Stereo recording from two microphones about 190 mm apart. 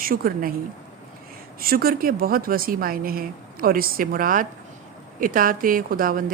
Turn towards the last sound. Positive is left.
turn(degrees=-45)  # may be behind; listen again after turning